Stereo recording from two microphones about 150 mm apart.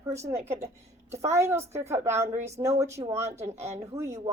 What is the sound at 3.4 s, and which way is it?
Speech, 45° right (ahead or behind).